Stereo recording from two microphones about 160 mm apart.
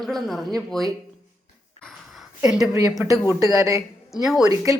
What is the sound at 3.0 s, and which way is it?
Speech, 15° right (ahead or behind).